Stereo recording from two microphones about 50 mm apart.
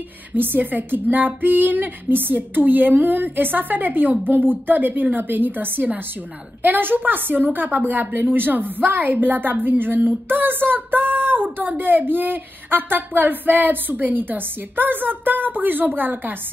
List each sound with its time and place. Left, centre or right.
0.3 s a woman's voice: right